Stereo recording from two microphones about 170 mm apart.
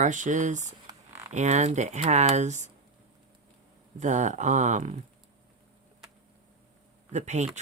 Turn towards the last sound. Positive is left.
turn(degrees=-40)  # may be behind; listen again after turning